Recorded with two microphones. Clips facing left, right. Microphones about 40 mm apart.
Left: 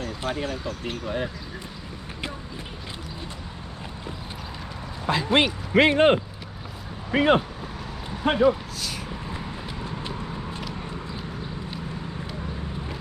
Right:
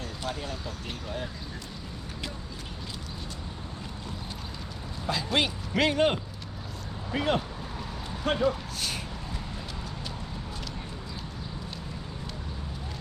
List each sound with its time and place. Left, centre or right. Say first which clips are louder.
0.0 s speech: left 6 dB; left
5.0 s speech: left 6 dB; left
8.1 s speech: left 6 dB; centre
9.3 s clip-clop: left 4 dB; left